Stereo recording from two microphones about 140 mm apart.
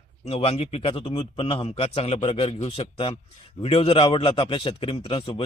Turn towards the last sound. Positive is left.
turn(degrees=40)  # may be behind; listen again after turning